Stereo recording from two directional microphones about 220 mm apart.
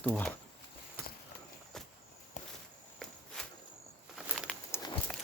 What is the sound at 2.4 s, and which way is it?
Walk, 35° left (ahead or behind).